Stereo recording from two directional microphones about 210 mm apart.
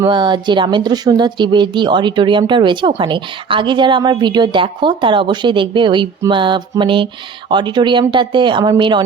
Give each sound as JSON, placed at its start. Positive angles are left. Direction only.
{"t": 0.0, "sound": "speech", "side_deg": -20}